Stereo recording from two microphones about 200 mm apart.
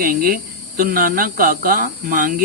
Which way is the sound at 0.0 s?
45° right (ahead or behind).